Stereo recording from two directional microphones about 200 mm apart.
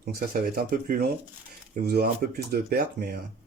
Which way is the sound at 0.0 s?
45° right (ahead or behind).